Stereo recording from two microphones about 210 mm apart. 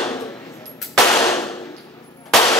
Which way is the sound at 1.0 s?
15° left (ahead or behind).